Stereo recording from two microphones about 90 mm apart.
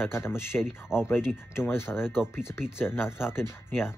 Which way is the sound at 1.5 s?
25° left (ahead or behind).